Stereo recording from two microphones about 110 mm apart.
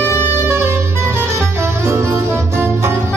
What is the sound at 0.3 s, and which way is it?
Music, 20° right (ahead or behind).